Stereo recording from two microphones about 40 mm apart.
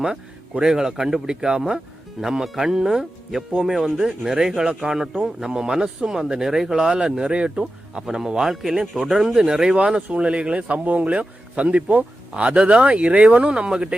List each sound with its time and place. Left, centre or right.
0.6 s speech: centre
2.2 s speech: centre
6.9 s speech: right
8.4 s speech: centre
9.4 s speech: centre